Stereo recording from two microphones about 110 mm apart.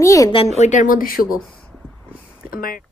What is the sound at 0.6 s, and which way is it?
Speech, 90° left.